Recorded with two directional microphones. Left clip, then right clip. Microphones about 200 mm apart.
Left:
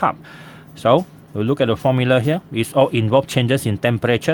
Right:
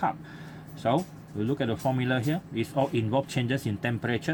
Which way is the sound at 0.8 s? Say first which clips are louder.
Left 12 dB; 50° left (ahead or behind).